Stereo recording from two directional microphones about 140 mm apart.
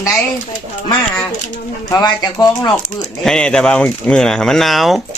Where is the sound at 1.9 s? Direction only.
25° left (ahead or behind).